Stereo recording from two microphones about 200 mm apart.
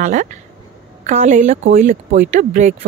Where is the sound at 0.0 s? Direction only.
40° right (ahead or behind).